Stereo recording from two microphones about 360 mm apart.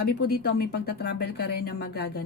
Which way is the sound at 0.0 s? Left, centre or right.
Left.